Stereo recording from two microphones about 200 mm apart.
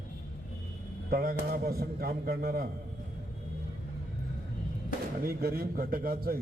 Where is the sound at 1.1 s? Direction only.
50° right (ahead or behind).